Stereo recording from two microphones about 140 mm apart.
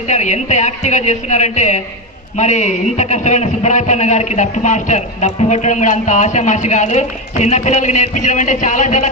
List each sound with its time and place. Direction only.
0.1 s speech: 55° left (ahead or behind)